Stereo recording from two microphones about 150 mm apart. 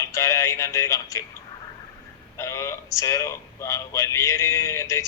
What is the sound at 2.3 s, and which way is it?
Speech, 20° left (ahead or behind).